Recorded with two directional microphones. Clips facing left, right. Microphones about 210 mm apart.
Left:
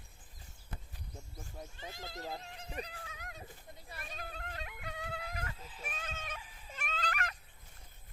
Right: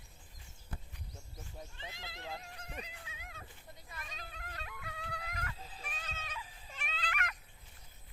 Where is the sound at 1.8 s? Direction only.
45° left (ahead or behind).